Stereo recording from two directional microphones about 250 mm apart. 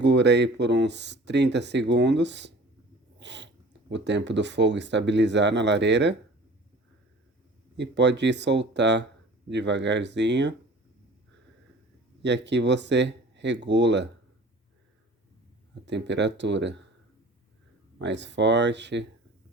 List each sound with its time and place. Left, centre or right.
0.0 s speech: right
7.8 s speech: right
12.2 s speech: right
15.9 s speech: right
18.0 s speech: right